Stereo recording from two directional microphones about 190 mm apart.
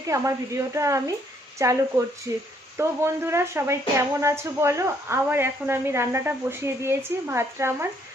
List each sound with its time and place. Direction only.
0.1 s a woman's voice: 15° right (ahead or behind)